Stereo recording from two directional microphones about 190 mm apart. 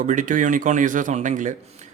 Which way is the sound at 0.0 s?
40° right (ahead or behind).